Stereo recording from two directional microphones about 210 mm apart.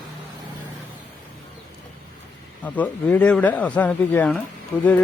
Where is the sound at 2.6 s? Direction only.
5° left (ahead or behind).